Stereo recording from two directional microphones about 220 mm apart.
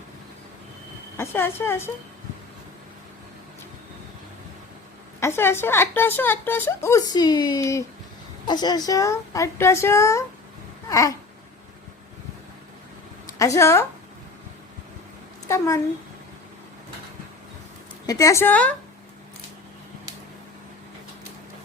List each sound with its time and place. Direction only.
1.1 s speech: 10° left (ahead or behind)
5.2 s speech: 10° left (ahead or behind)
10.8 s babbling: 15° left (ahead or behind)
13.4 s speech: 15° left (ahead or behind)
15.4 s a child's voice: 15° left (ahead or behind)
18.0 s speech: 15° left (ahead or behind)